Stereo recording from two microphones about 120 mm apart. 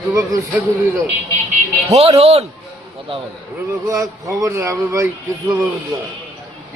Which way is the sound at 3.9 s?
25° right (ahead or behind).